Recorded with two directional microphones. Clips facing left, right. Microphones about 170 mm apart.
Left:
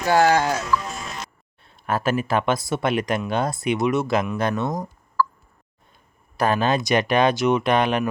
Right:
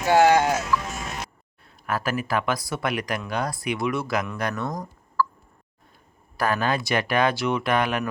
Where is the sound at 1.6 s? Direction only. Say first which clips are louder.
Left 4 dB; 25° left (ahead or behind).